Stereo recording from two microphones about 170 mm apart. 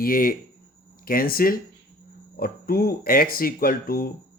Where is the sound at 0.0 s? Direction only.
55° left (ahead or behind).